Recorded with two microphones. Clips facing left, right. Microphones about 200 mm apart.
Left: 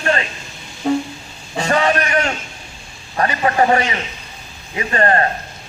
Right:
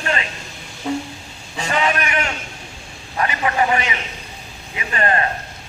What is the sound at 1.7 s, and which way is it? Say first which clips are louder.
Speech: left 4 dB; 40° left (ahead or behind).